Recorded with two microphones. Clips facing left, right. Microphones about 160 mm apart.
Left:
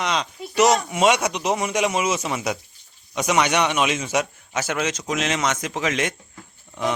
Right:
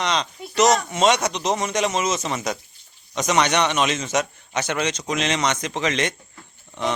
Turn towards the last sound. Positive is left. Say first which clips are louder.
# left 1 dB
turn(degrees=10)  # may be behind; listen again after turning